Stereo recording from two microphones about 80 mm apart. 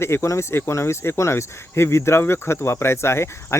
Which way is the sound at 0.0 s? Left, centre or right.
Left.